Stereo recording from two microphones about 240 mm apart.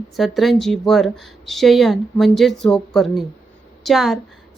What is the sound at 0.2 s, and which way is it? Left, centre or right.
Speech, centre.